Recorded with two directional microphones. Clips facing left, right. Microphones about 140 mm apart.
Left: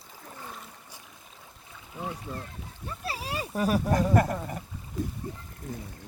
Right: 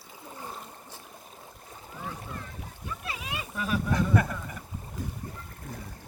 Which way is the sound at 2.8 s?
35° left (ahead or behind).